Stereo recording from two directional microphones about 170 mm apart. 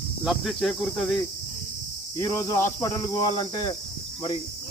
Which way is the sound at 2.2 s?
20° left (ahead or behind).